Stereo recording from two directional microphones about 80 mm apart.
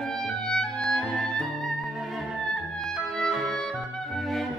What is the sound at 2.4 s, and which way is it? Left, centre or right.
Music, centre.